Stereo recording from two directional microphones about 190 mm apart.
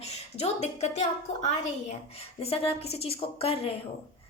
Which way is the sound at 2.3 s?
30° left (ahead or behind).